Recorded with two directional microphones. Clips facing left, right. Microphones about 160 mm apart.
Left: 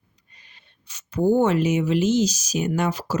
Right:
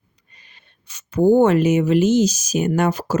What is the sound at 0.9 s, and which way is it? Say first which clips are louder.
Speech: right 5 dB; 50° right (ahead or behind).